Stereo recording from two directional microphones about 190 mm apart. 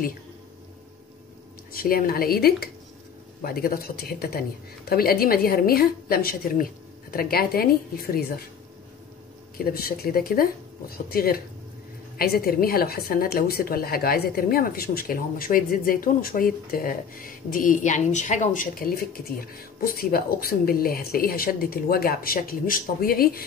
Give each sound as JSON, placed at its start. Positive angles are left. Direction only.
{"t": 1.7, "sound": "a woman's voice", "side_deg": 50}
{"t": 9.6, "sound": "a woman's voice", "side_deg": 50}